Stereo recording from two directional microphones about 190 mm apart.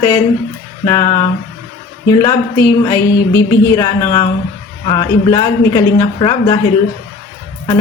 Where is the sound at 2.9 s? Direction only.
20° left (ahead or behind).